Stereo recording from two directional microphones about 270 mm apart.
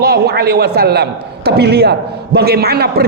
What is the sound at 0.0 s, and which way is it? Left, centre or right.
A man's voice, right.